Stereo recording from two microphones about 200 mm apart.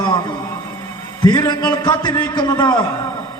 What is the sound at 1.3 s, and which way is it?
A man's voice, 20° left (ahead or behind).